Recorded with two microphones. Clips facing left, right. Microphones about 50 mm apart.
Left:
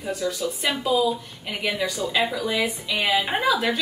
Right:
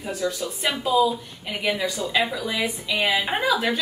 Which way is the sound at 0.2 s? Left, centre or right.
Centre.